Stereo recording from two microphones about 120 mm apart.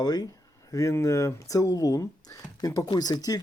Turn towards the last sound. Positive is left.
turn(degrees=30)  # may be behind; listen again after turning